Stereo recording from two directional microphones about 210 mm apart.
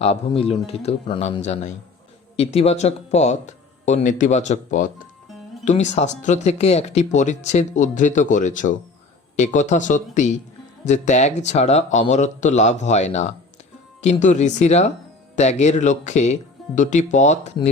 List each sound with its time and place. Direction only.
0.0 s speech: 30° left (ahead or behind)